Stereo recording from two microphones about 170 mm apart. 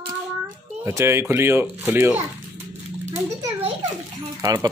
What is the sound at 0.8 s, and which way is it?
Speech, 15° right (ahead or behind).